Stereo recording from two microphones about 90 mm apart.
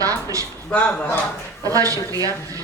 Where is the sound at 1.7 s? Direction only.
40° right (ahead or behind).